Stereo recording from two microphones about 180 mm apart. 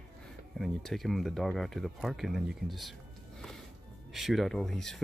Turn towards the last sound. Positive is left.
turn(degrees=0)  # may be behind; listen again after turning